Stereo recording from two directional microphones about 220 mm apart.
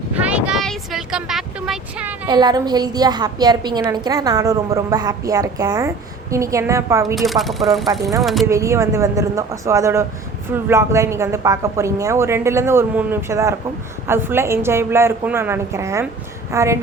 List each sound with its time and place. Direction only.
0.1 s vehicle: 5° right (ahead or behind)
2.2 s a woman's voice: 20° right (ahead or behind)
7.2 s speech: centre (ahead or behind)
8.4 s a woman's voice: 15° right (ahead or behind)